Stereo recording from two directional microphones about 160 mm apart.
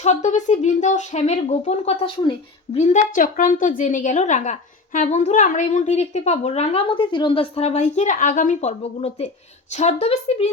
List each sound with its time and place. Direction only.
0.0 s a woman's voice: 50° left (ahead or behind)
2.7 s a woman's voice: 50° left (ahead or behind)